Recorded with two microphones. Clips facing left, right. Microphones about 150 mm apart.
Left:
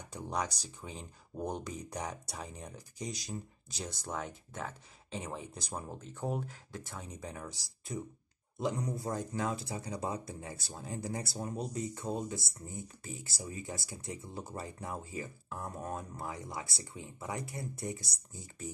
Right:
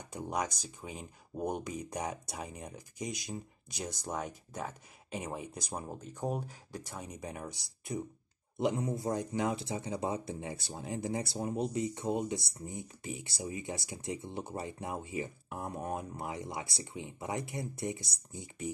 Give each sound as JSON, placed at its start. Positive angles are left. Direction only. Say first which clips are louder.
{"t": 0.1, "sound": "speech", "louder": "right 1 dB", "side_deg": -10}
{"t": 8.5, "sound": "speech", "louder": "right 3 dB", "side_deg": -25}